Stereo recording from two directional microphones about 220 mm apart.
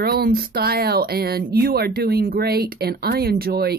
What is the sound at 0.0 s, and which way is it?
Speech, 45° right (ahead or behind).